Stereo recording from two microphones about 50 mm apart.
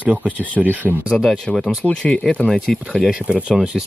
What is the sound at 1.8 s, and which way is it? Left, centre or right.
Speech, left.